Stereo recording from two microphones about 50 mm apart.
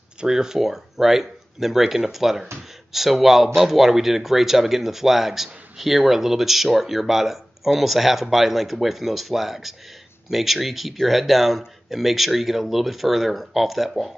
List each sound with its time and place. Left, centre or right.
0.2 s speech: centre